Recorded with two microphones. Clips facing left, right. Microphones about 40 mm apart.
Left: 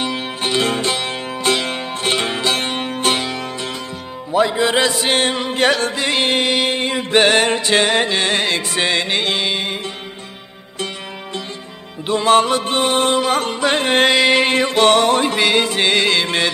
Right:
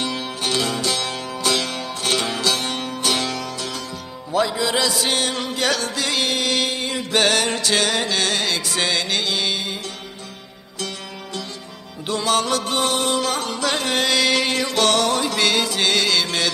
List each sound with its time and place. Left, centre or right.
0.0 s music: left
3.2 s music: left
4.3 s mantra: left
9.4 s music: left
12.1 s music: left